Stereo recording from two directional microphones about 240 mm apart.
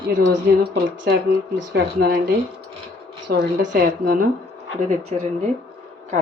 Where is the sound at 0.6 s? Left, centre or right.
Right.